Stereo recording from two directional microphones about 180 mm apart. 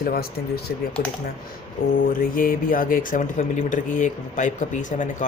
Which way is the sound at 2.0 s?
50° left (ahead or behind).